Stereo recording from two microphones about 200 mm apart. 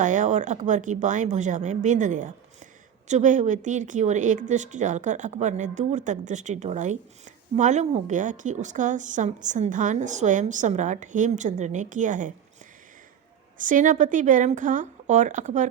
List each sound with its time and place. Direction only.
0.0 s a woman's voice: 40° right (ahead or behind)
13.6 s a woman's voice: 40° right (ahead or behind)